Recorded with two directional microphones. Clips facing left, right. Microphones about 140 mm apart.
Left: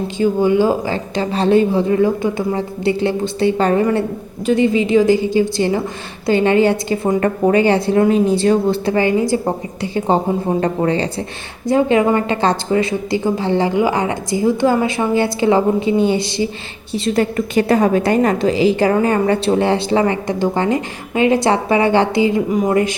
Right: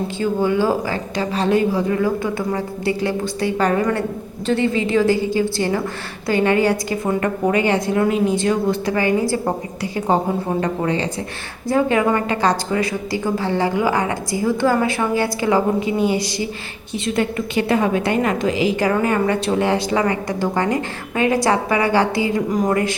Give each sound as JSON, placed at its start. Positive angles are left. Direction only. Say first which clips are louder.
{"t": 0.2, "sound": "a woman's voice", "louder": "left 5 dB", "side_deg": 15}
{"t": 1.1, "sound": "a woman's voice", "louder": "left 4 dB", "side_deg": 30}
{"t": 4.4, "sound": "a woman's voice", "louder": "left 4 dB", "side_deg": 15}
{"t": 11.7, "sound": "a woman's voice", "louder": "left 3 dB", "side_deg": 20}
{"t": 16.9, "sound": "a woman's voice", "louder": "left 4 dB", "side_deg": 40}
{"t": 22.4, "sound": "speech", "louder": "left 2 dB", "side_deg": 5}
{"t": 22.7, "sound": "a woman's voice", "louder": "left 3 dB", "side_deg": 20}